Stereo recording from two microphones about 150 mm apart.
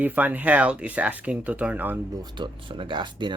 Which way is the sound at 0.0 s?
10° right (ahead or behind).